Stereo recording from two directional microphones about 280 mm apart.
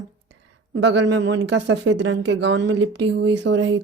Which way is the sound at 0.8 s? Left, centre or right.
Right.